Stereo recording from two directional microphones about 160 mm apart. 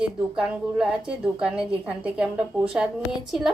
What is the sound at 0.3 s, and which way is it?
A woman's voice, 5° right (ahead or behind).